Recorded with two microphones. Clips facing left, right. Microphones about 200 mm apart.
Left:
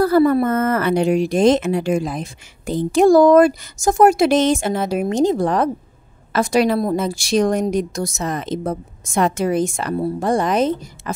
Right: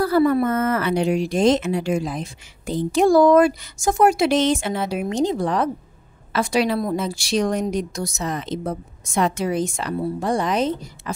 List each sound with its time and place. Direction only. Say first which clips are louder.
0.0 s a woman's voice: left 3 dB; 45° left (ahead or behind)